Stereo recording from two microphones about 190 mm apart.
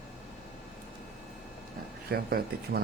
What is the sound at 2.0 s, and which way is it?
Speech, 55° right (ahead or behind).